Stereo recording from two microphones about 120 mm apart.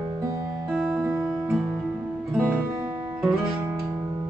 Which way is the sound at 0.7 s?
5° right (ahead or behind).